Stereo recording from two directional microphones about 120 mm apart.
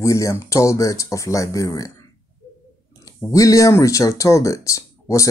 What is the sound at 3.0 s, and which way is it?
Speech, 25° left (ahead or behind).